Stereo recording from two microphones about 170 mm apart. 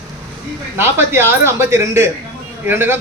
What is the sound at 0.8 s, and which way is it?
Speech, 15° right (ahead or behind).